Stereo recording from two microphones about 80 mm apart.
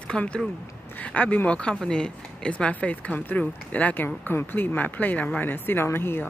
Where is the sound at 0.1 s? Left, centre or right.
Centre.